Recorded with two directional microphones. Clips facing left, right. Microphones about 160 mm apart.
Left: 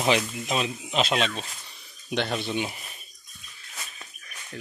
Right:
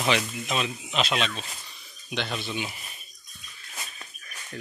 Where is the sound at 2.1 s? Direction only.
45° left (ahead or behind).